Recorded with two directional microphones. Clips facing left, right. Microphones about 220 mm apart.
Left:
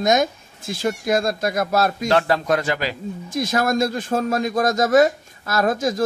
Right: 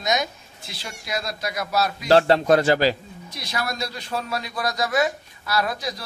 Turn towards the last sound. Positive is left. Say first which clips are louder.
# left 7 dB
turn(degrees=45)  # may be behind; listen again after turning